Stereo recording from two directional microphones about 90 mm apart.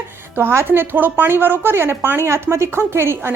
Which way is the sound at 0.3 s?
25° right (ahead or behind).